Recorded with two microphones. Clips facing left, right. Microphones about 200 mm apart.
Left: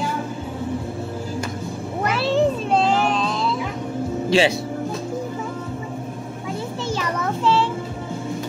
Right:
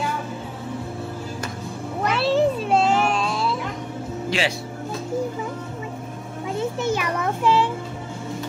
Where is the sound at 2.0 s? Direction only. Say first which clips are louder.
Even; centre (ahead or behind).